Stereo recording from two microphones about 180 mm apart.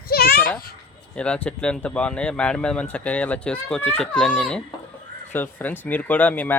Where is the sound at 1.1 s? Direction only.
5° left (ahead or behind).